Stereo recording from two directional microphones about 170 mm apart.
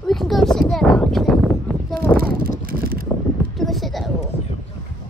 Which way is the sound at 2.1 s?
60° right (ahead or behind).